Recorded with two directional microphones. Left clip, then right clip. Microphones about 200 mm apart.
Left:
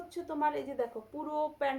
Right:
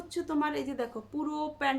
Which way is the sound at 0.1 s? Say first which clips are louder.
Right 1 dB; 30° right (ahead or behind).